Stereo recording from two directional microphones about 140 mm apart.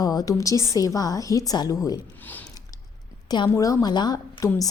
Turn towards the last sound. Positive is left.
turn(degrees=25)  # may be behind; listen again after turning